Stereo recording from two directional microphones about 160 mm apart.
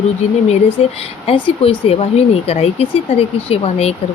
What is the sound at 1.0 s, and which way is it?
Speech, 35° left (ahead or behind).